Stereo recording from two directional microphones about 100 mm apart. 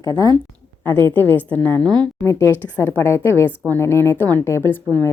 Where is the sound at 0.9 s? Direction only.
20° left (ahead or behind).